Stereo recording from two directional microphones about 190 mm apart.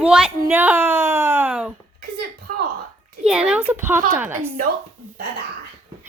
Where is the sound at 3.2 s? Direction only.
5° right (ahead or behind).